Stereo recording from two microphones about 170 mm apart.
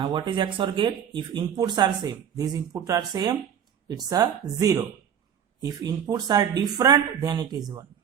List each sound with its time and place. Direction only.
0.0 s speech: 25° right (ahead or behind)